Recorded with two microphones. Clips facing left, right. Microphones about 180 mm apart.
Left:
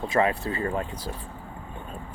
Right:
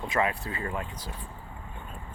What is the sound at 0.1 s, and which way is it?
Speech, 30° left (ahead or behind).